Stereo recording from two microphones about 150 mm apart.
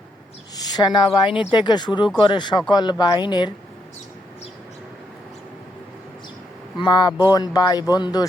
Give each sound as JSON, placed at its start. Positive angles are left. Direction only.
{"t": 0.5, "sound": "a woman's voice", "side_deg": 25}
{"t": 6.8, "sound": "speech", "side_deg": 30}